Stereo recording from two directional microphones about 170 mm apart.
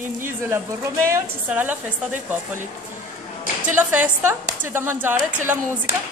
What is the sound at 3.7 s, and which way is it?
Speech, 10° right (ahead or behind).